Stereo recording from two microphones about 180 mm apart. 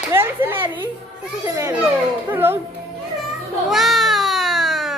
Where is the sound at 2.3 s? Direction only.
10° right (ahead or behind).